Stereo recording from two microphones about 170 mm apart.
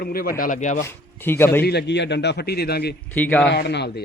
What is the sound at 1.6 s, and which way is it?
A man's voice, 75° left (ahead or behind).